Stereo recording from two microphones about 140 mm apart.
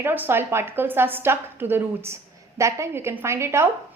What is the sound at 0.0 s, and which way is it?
A woman's voice, 15° right (ahead or behind).